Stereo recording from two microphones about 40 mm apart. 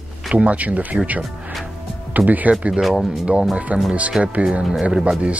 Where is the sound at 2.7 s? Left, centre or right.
Centre.